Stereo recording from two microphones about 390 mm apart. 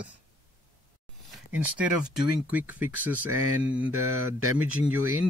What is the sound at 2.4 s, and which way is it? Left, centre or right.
Speech, centre.